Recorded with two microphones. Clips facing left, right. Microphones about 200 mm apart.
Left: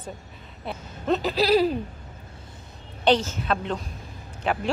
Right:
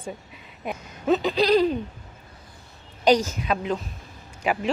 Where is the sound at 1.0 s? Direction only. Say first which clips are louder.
Right 2 dB; centre (ahead or behind).